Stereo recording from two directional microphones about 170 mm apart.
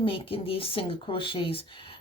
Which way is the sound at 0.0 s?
30° left (ahead or behind).